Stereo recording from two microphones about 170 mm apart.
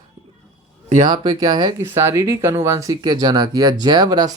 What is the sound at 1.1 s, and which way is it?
Speech, 25° right (ahead or behind).